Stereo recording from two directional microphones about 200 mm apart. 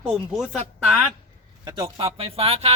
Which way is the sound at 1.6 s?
20° right (ahead or behind).